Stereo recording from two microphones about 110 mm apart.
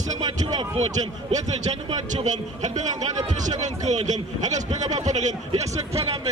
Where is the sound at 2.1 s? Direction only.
90° right.